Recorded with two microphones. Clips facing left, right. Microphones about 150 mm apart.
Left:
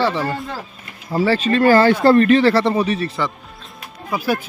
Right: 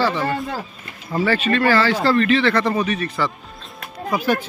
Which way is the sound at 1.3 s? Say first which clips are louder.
Left 4 dB; 35° left (ahead or behind).